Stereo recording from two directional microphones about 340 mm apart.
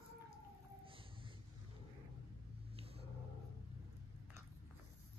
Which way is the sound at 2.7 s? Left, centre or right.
Centre.